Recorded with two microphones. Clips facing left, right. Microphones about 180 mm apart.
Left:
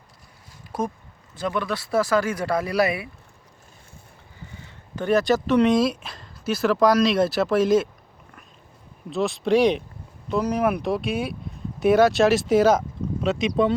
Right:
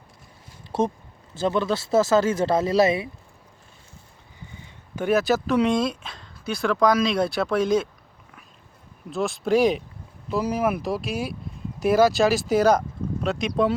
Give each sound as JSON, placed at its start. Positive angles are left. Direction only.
{"t": 1.3, "sound": "speech", "side_deg": -30}
{"t": 4.6, "sound": "speech", "side_deg": -10}
{"t": 9.0, "sound": "speech", "side_deg": 0}